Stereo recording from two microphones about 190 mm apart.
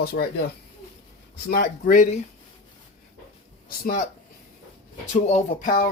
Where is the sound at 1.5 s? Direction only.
50° left (ahead or behind).